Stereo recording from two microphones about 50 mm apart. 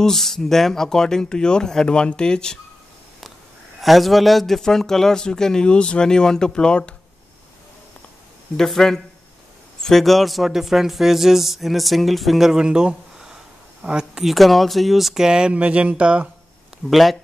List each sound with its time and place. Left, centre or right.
0.0 s speech: centre
3.8 s speech: centre
8.5 s a man's voice: centre
14.2 s speech: centre; by 16.3 s right
16.9 s a man's voice: centre